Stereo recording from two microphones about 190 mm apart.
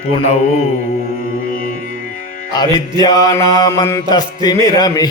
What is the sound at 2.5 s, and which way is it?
Mantra, 20° left (ahead or behind).